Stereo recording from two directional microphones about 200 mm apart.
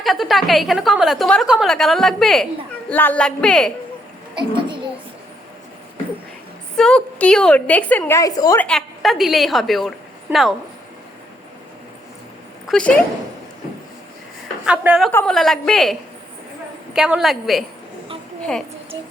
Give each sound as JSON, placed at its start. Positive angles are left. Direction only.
{"t": 0.0, "sound": "a woman's voice", "side_deg": 0}
{"t": 4.4, "sound": "a child's voice", "side_deg": -25}
{"t": 6.7, "sound": "a woman's voice", "side_deg": 5}
{"t": 8.6, "sound": "a woman's voice", "side_deg": 0}
{"t": 12.6, "sound": "speech", "side_deg": 5}
{"t": 14.6, "sound": "a woman's voice", "side_deg": -5}